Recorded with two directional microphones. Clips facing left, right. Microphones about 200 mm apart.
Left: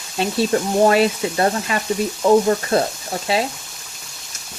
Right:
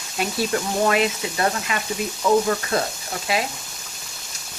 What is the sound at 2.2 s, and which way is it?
Frying, 30° left (ahead or behind).